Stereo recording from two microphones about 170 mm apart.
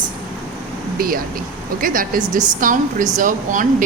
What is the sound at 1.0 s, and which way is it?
A woman's voice, 60° right (ahead or behind).